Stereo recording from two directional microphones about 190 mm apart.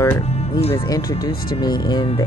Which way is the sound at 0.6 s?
30° left (ahead or behind).